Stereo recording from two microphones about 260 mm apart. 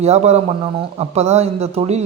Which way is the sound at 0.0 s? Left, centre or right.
Right.